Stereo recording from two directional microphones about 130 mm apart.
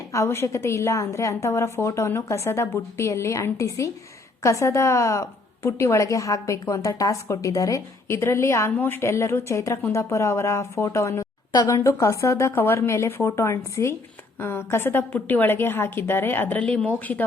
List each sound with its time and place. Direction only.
0.1 s a woman's voice: 20° left (ahead or behind)